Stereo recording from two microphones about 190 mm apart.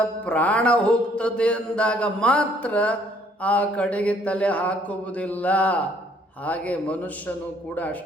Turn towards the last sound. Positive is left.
turn(degrees=10)  # may be behind; listen again after turning